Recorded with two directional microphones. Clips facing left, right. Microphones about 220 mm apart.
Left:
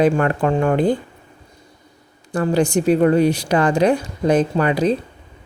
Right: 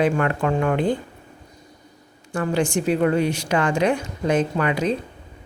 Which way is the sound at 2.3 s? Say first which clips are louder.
Left 4 dB; 35° left (ahead or behind).